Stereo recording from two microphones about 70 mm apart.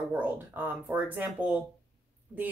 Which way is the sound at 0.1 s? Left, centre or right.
Right.